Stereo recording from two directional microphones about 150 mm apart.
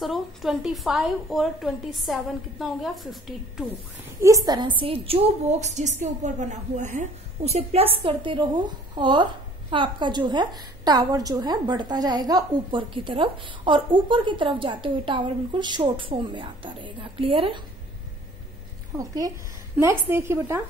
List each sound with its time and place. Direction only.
0.0 s a woman's voice: centre (ahead or behind)
4.2 s a woman's voice: 20° right (ahead or behind); by 17.6 s 35° right (ahead or behind)
18.9 s a woman's voice: 25° right (ahead or behind)